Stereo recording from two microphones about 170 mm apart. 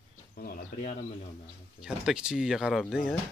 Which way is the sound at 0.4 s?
65° left (ahead or behind).